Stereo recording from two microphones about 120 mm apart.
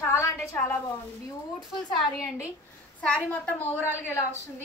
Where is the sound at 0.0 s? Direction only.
20° left (ahead or behind).